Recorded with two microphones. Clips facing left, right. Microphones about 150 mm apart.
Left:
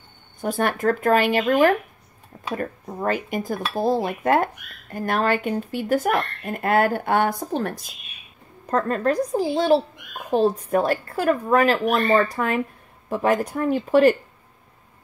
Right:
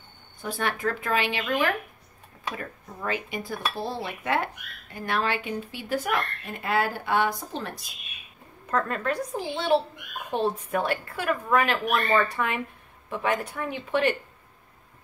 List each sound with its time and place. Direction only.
0.4 s speech: 45° left (ahead or behind)
8.6 s speech: 35° left (ahead or behind)